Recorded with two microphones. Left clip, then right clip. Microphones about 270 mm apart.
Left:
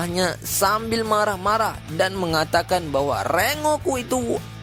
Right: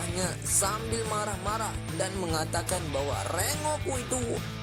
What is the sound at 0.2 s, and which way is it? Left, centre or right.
Speech, left.